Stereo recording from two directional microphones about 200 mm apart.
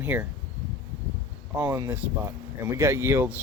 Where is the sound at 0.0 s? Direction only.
10° right (ahead or behind).